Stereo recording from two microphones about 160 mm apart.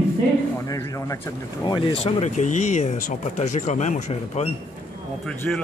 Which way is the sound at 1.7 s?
35° left (ahead or behind).